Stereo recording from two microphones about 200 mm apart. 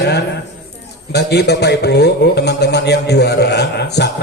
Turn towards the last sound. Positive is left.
turn(degrees=55)  # may be behind; listen again after turning